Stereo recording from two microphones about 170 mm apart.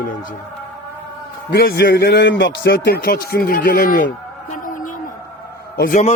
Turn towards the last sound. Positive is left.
turn(degrees=50)  # may be behind; listen again after turning